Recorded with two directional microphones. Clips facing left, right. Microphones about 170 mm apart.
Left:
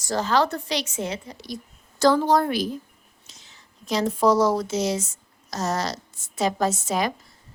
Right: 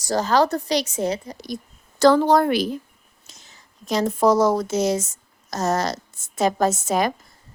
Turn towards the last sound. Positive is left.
turn(degrees=-50)  # may be behind; listen again after turning